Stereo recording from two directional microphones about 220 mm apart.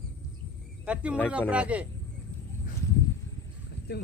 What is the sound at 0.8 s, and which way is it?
Speech, 5° right (ahead or behind).